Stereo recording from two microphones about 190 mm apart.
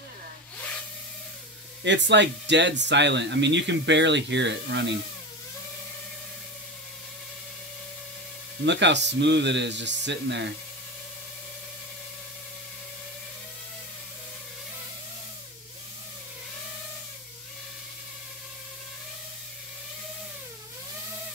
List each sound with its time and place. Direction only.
1.9 s speech: 65° right (ahead or behind)
8.6 s speech: 70° right (ahead or behind)